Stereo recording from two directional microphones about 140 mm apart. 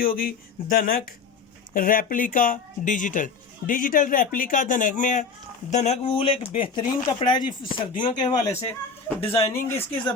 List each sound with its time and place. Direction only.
0.0 s speech: 90° left; by 5.2 s 65° left (ahead or behind)
5.7 s speech: 55° left (ahead or behind)
9.5 s speech: 15° left (ahead or behind)